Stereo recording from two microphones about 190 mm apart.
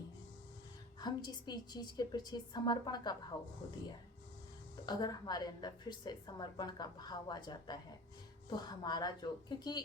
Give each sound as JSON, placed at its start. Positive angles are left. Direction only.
{"t": 1.0, "sound": "a woman's voice", "side_deg": 20}
{"t": 4.9, "sound": "a woman's voice", "side_deg": 20}